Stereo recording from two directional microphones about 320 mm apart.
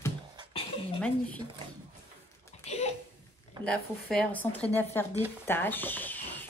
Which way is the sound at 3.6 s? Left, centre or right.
Centre.